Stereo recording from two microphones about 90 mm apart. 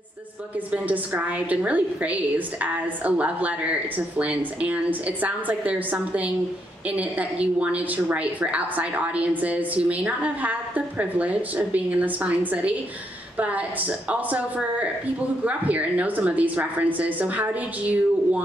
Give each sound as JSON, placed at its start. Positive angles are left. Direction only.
{"t": 0.7, "sound": "a woman's voice", "side_deg": -20}